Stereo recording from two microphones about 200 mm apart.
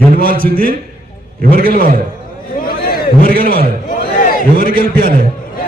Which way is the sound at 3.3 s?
45° right (ahead or behind).